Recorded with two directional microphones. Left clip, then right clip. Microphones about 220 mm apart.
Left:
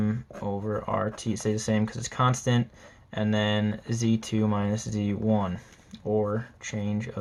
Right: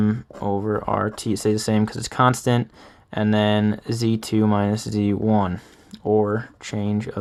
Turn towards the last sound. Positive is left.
turn(degrees=-50)  # may be behind; listen again after turning